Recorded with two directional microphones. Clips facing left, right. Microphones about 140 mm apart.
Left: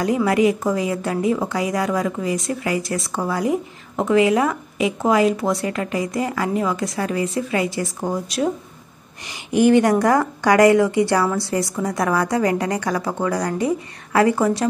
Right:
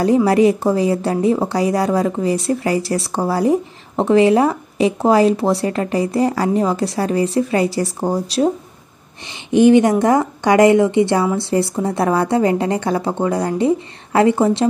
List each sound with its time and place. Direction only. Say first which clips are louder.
0.0 s a woman's voice: right 5 dB; 35° right (ahead or behind)